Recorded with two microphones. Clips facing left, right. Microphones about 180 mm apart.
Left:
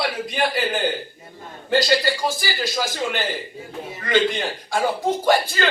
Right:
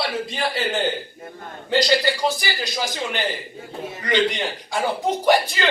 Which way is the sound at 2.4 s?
15° right (ahead or behind).